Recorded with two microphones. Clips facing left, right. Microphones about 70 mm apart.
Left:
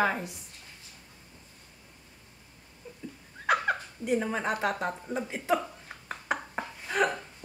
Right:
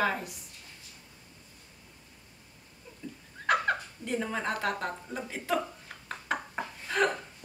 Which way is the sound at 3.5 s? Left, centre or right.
Centre.